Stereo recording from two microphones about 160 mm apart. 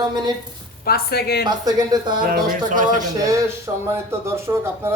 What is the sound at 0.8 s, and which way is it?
Speech, 75° left (ahead or behind).